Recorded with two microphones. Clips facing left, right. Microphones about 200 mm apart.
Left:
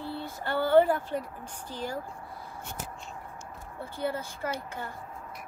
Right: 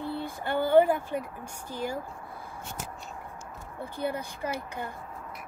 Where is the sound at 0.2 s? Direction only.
15° right (ahead or behind).